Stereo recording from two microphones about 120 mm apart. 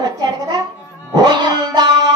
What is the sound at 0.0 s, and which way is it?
Music, 35° right (ahead or behind).